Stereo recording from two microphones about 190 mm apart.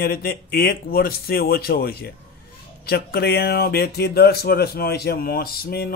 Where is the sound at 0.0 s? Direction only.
50° left (ahead or behind).